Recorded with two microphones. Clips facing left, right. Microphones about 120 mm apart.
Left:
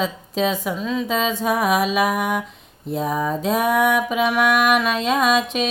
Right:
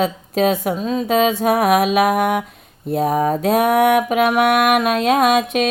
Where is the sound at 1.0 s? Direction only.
55° right (ahead or behind).